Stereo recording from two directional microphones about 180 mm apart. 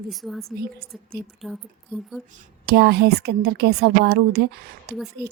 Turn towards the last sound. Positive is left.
turn(degrees=-65)  # may be behind; listen again after turning